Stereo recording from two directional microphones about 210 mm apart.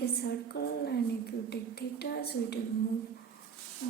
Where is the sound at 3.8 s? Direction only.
50° left (ahead or behind).